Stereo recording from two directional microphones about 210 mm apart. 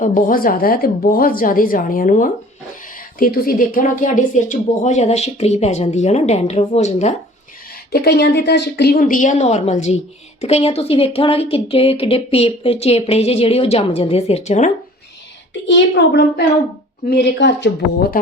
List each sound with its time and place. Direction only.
0.0 s a woman's voice: 40° left (ahead or behind)
7.9 s a woman's voice: 50° left (ahead or behind); by 14.7 s 30° left (ahead or behind)
15.6 s a woman's voice: 65° left (ahead or behind)